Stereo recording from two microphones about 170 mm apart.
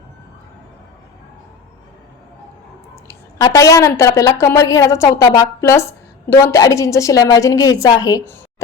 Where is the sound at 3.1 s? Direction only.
20° left (ahead or behind).